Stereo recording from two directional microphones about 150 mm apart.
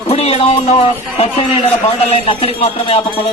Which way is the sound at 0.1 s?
45° left (ahead or behind).